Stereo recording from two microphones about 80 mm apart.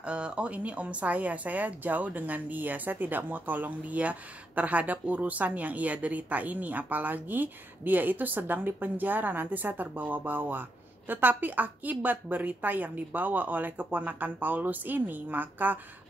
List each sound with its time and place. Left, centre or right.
0.0 s speech: centre